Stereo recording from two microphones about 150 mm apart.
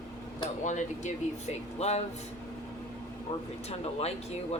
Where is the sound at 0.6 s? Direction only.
55° left (ahead or behind).